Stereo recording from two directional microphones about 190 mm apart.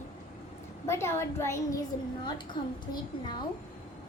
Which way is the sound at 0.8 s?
15° left (ahead or behind).